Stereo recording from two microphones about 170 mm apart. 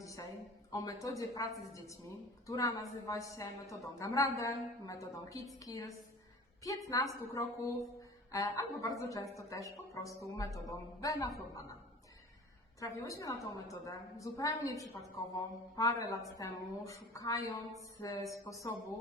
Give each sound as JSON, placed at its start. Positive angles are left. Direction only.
{"t": 0.0, "sound": "a sound", "side_deg": 20}
{"t": 0.7, "sound": "a woman's voice", "side_deg": 20}
{"t": 2.5, "sound": "a woman's voice", "side_deg": 20}
{"t": 12.8, "sound": "a woman's voice", "side_deg": 20}